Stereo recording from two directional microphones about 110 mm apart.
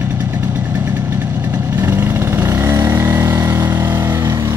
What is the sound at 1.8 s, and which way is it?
Vehicle, 20° right (ahead or behind).